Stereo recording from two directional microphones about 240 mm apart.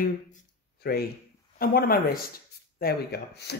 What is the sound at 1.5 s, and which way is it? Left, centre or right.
Speech, left.